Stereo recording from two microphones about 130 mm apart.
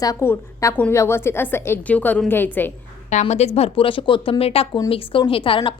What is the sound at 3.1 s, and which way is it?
A woman's voice, 60° left (ahead or behind).